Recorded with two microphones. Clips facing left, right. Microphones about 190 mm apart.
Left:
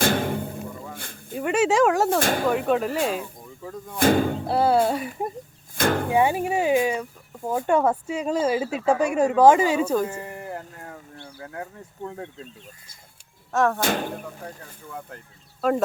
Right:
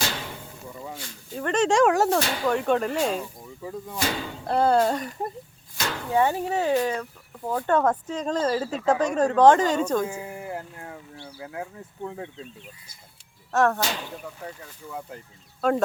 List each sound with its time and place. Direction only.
0.0 s music: 50° left (ahead or behind)
0.9 s snake: 55° left (ahead or behind)
1.4 s speech: 10° left (ahead or behind)
2.1 s speech: 50° left (ahead or behind)
2.5 s speech: 5° left (ahead or behind)
3.6 s speech: 5° right (ahead or behind)
3.9 s speech: 50° left (ahead or behind)
4.4 s speech: 5° left (ahead or behind)
5.7 s speech: 50° left (ahead or behind)
6.1 s speech: 15° left (ahead or behind)
13.5 s speech: centre (ahead or behind)
13.8 s speech: 55° left (ahead or behind)
14.4 s speech: 5° right (ahead or behind)